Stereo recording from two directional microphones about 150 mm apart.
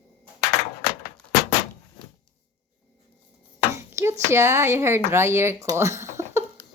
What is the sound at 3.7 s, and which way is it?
Speech, 20° right (ahead or behind).